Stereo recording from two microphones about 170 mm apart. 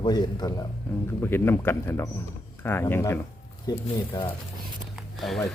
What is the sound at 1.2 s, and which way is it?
Speech, 15° left (ahead or behind).